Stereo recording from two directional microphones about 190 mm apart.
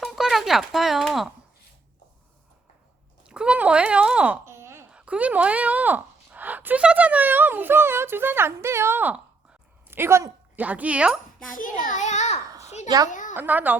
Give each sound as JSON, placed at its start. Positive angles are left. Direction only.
{"t": 0.0, "sound": "a sound", "side_deg": 0}
{"t": 3.2, "sound": "speech", "side_deg": -5}
{"t": 11.5, "sound": "a child's voice", "side_deg": 45}
{"t": 12.5, "sound": "a sound", "side_deg": -15}
{"t": 13.1, "sound": "a woman's voice", "side_deg": 40}
{"t": 13.3, "sound": "speech", "side_deg": -10}